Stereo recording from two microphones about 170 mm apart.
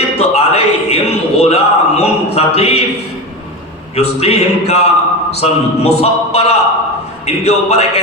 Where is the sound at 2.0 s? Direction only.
35° left (ahead or behind).